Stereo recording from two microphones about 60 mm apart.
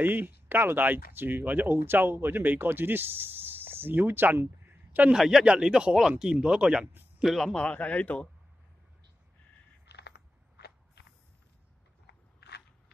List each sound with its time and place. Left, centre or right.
0.0 s speech: right
4.6 s a sound: right
5.1 s speech: centre
7.5 s speech: centre